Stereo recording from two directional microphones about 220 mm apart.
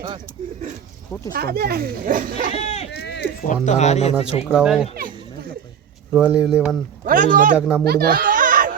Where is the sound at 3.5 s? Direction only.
30° left (ahead or behind).